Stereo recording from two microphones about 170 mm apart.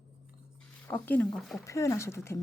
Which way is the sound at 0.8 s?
10° left (ahead or behind).